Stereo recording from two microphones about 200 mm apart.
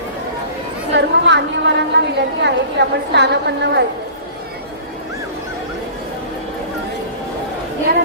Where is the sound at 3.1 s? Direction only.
60° right (ahead or behind).